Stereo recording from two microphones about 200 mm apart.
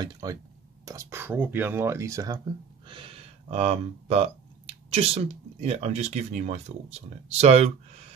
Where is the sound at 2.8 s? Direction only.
25° right (ahead or behind).